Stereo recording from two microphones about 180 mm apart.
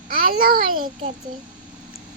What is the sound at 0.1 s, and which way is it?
Speech, 50° right (ahead or behind).